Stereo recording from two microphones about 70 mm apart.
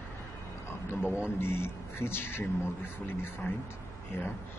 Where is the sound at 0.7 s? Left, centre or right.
Left.